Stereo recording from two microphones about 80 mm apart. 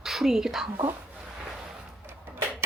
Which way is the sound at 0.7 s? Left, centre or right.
Right.